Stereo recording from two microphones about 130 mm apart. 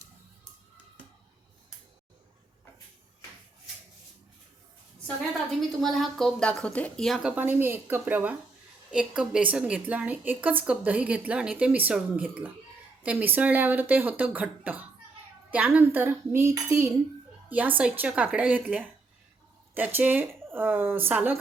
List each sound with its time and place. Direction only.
5.8 s a woman's voice: centre (ahead or behind)